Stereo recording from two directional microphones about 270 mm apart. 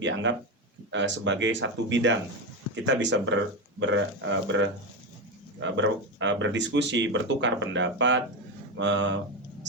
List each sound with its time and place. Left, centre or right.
0.0 s speech: right